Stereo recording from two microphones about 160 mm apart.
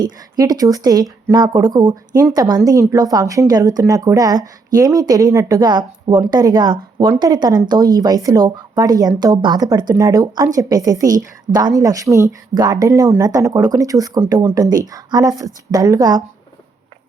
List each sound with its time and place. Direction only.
0.0 s speech: 25° right (ahead or behind)